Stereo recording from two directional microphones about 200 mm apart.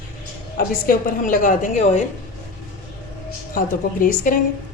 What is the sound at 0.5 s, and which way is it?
A woman's voice, 45° left (ahead or behind).